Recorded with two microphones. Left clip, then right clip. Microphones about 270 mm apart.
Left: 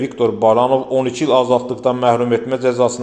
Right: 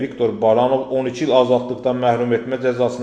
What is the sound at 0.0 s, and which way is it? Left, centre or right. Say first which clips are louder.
A man's voice: left 3 dB; left.